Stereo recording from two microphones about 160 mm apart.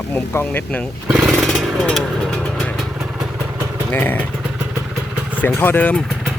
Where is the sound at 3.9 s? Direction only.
10° left (ahead or behind).